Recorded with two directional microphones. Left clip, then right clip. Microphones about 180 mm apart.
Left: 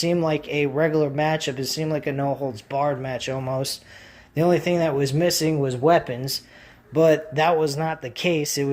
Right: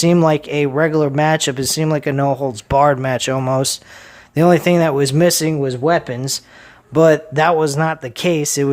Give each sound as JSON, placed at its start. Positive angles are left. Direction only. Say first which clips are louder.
{"t": 0.0, "sound": "speech", "louder": "right 8 dB", "side_deg": -40}